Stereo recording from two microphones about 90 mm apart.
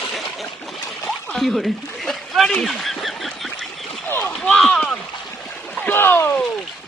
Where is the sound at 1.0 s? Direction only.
5° left (ahead or behind).